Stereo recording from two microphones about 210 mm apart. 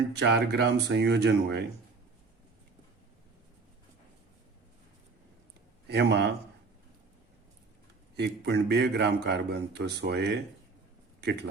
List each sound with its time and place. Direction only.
0.1 s a man's voice: 55° right (ahead or behind)
5.9 s a man's voice: 50° right (ahead or behind)
8.1 s a man's voice: 55° right (ahead or behind)